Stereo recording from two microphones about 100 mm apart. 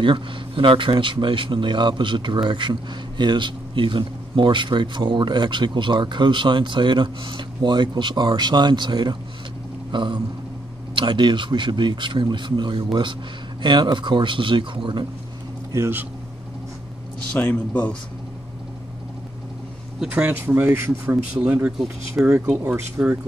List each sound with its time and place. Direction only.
0.0 s a man's voice: 55° right (ahead or behind)
9.8 s a sound: 50° right (ahead or behind)
11.0 s a man's voice: 50° right (ahead or behind)
17.3 s a man's voice: 15° left (ahead or behind)
20.0 s speech: 10° right (ahead or behind)
20.5 s speech: 30° right (ahead or behind)
21.4 s speech: 15° right (ahead or behind)